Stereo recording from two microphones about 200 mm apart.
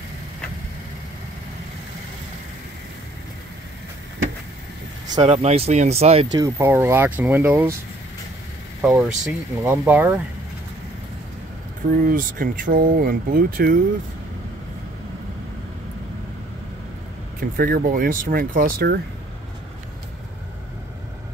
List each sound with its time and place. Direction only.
5.1 s speech: 30° right (ahead or behind)
6.3 s speech: 15° right (ahead or behind)
8.8 s speech: 5° right (ahead or behind)
11.9 s speech: 45° right (ahead or behind)
17.4 s speech: 45° right (ahead or behind)